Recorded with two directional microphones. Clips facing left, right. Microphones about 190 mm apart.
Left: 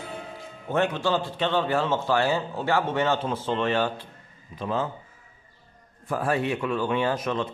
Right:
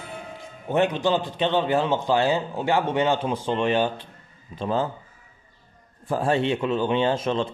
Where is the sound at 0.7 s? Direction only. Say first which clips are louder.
Right 3 dB; 20° right (ahead or behind).